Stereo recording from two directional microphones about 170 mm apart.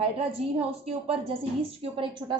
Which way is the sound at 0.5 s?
35° right (ahead or behind).